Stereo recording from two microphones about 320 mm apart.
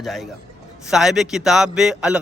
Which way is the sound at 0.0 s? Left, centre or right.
Centre.